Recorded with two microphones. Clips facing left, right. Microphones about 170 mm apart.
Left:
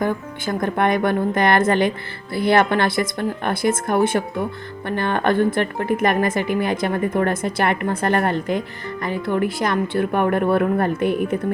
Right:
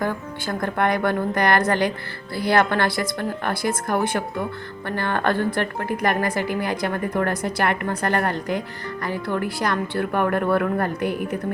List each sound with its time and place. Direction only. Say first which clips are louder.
0.0 s speech: left 3 dB; 20° left (ahead or behind)